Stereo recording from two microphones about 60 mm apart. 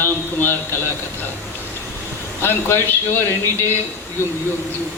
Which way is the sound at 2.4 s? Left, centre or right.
Left.